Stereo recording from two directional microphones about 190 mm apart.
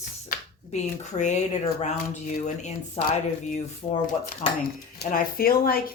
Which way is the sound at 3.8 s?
25° left (ahead or behind).